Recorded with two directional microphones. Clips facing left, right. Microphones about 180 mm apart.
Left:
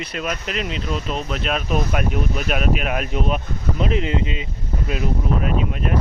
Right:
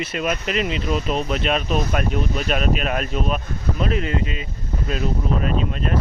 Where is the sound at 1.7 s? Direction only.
10° left (ahead or behind).